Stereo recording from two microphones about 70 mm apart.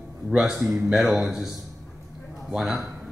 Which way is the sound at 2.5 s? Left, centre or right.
Centre.